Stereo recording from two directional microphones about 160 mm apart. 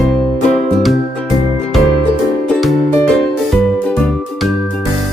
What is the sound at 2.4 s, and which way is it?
Music, centre (ahead or behind).